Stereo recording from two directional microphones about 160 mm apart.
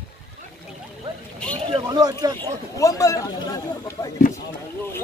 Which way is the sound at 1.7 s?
25° right (ahead or behind).